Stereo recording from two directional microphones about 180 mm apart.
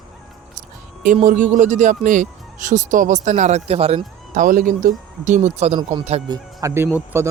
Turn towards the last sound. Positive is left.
turn(degrees=-10)  # may be behind; listen again after turning